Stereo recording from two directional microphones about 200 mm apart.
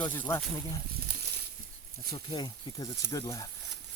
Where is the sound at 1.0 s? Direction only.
55° right (ahead or behind).